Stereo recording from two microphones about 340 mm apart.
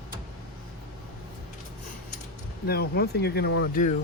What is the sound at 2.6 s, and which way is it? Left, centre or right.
Speech, left.